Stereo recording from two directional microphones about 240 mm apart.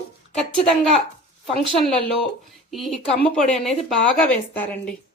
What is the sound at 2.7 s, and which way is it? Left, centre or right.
A woman's voice, centre.